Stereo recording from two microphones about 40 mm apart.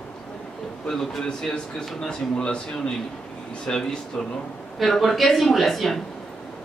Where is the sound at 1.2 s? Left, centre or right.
Centre.